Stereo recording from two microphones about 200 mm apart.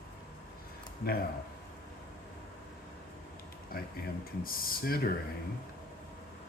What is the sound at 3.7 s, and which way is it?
Speech, 50° left (ahead or behind).